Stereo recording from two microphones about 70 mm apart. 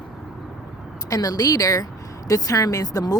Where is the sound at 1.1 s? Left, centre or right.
Left.